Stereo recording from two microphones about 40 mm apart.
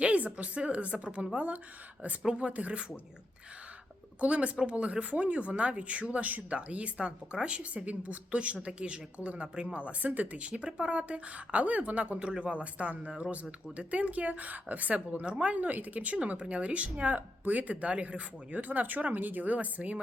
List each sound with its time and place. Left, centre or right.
0.0 s speech: right
2.5 s speech: right
4.2 s speech: right
14.9 s speech: right
16.1 s speech: right